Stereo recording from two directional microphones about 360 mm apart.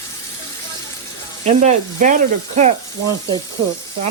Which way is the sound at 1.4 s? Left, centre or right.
Centre.